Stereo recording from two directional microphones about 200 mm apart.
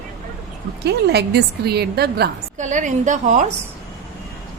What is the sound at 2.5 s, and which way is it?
Speech, 40° right (ahead or behind).